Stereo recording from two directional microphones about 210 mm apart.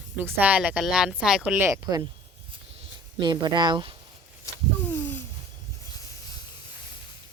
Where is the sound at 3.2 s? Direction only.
20° right (ahead or behind).